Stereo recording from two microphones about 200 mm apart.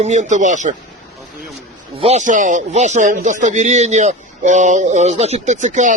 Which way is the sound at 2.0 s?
35° right (ahead or behind).